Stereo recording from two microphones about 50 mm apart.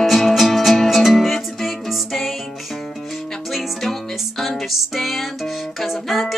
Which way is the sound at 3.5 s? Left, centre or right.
Centre.